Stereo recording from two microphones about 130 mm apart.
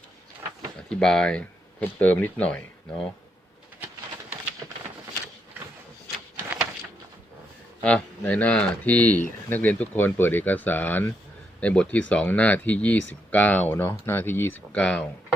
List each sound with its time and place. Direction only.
0.9 s speech: 5° left (ahead or behind)
7.8 s speech: 10° left (ahead or behind)